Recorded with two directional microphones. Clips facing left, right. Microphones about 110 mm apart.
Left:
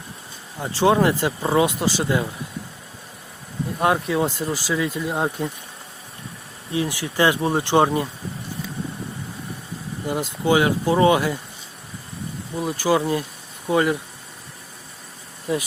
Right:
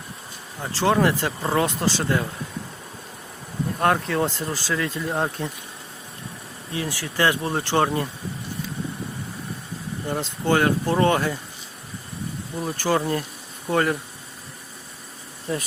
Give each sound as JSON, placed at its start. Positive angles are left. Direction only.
{"t": 0.6, "sound": "speech", "side_deg": 15}
{"t": 3.8, "sound": "speech", "side_deg": 10}
{"t": 6.7, "sound": "speech", "side_deg": 15}
{"t": 10.1, "sound": "speech", "side_deg": 10}
{"t": 12.5, "sound": "speech", "side_deg": 10}
{"t": 15.5, "sound": "speech", "side_deg": 5}